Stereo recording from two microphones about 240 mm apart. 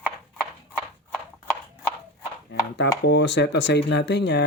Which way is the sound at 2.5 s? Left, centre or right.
Left.